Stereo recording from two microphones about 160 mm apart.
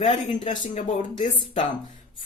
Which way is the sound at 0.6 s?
50° left (ahead or behind).